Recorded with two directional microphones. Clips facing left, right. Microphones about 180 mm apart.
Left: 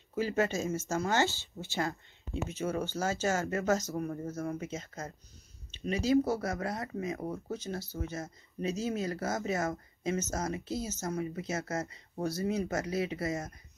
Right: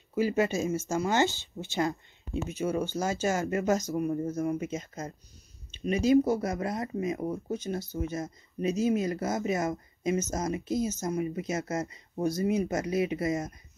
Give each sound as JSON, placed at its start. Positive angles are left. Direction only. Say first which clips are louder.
{"t": 0.1, "sound": "speech", "louder": "right 4 dB", "side_deg": -10}